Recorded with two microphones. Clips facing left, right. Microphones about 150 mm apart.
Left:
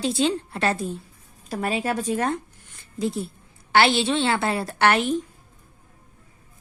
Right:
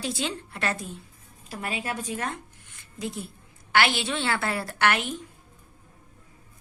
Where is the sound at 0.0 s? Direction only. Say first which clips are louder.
Left 8 dB; 25° left (ahead or behind).